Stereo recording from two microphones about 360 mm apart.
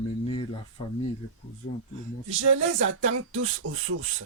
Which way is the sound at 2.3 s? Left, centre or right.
Right.